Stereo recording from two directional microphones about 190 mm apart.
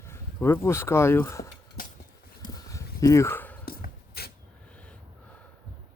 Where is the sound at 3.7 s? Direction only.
55° left (ahead or behind).